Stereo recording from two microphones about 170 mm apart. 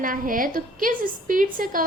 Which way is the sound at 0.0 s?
55° right (ahead or behind).